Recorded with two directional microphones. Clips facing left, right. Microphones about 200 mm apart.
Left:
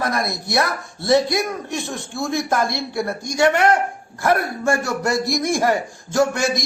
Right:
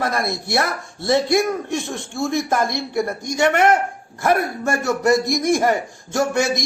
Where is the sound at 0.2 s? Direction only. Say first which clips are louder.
Even; 25° right (ahead or behind).